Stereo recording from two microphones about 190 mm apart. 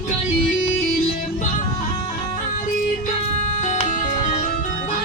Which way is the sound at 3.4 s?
40° left (ahead or behind).